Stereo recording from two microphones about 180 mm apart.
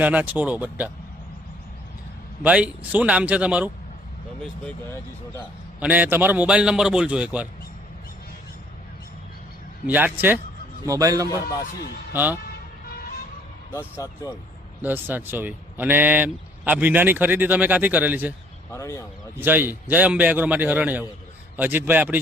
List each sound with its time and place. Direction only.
0.0 s speech: 10° right (ahead or behind)
2.4 s speech: 10° right (ahead or behind)
5.8 s speech: 10° right (ahead or behind)
9.8 s a man's voice: 10° right (ahead or behind)
11.3 s speech: 20° left (ahead or behind)
12.1 s speech: 10° right (ahead or behind)
14.0 s speech: 20° left (ahead or behind)
14.8 s speech: 10° right (ahead or behind)
18.7 s speech: 15° left (ahead or behind)
19.4 s speech: 10° right (ahead or behind)